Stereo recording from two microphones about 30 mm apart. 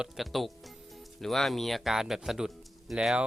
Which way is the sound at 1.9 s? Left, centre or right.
Centre.